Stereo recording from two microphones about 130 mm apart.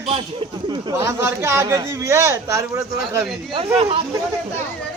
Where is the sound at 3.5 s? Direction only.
45° right (ahead or behind).